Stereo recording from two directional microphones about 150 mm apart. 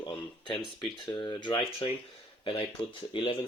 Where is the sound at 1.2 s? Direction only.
30° left (ahead or behind).